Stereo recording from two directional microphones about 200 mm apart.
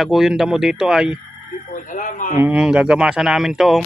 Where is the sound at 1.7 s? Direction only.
40° left (ahead or behind).